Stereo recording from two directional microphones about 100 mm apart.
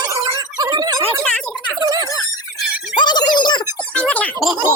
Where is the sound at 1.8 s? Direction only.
40° right (ahead or behind).